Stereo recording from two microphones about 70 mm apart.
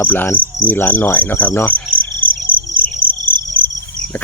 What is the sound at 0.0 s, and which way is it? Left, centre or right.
Cricket, left.